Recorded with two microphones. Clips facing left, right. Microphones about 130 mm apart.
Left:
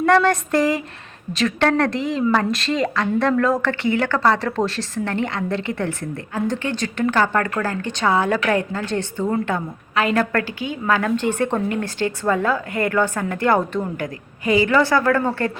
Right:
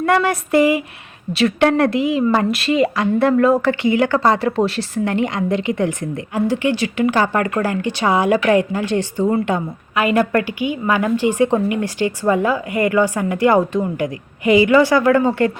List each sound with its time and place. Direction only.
0.0 s a woman's voice: 5° right (ahead or behind)